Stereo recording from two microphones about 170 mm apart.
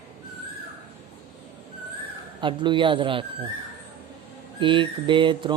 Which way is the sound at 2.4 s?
30° right (ahead or behind).